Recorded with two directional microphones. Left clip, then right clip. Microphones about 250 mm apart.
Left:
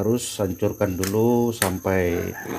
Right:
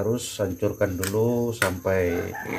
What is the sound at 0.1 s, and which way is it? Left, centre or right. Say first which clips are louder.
Speech: left 2 dB; left.